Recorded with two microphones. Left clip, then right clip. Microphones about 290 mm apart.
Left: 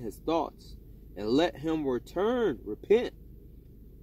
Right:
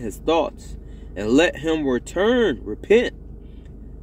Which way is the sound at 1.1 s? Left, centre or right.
Centre.